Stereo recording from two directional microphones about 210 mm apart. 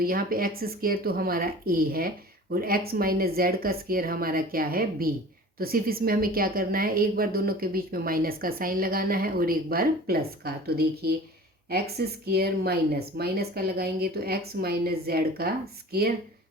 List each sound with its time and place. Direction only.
0.0 s a woman's voice: 45° right (ahead or behind)